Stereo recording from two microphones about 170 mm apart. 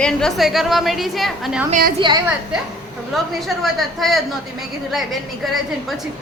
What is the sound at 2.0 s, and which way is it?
Speech, 25° right (ahead or behind).